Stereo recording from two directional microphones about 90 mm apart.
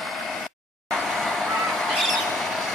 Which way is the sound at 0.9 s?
5° left (ahead or behind).